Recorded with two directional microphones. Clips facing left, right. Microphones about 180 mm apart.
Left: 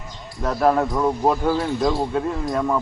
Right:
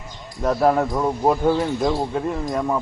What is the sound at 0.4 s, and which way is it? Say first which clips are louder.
Speech: right 1 dB; 20° right (ahead or behind).